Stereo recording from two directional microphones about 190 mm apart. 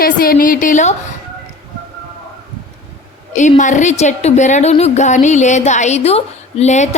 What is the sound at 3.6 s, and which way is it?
A woman's voice, 40° left (ahead or behind).